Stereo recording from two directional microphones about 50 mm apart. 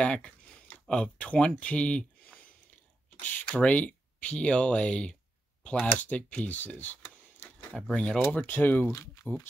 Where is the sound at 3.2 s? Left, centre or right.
Left.